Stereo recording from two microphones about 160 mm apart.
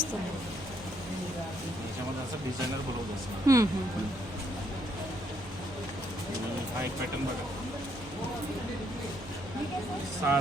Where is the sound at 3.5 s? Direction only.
20° right (ahead or behind).